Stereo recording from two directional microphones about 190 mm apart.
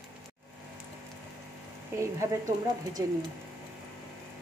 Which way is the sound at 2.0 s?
15° right (ahead or behind).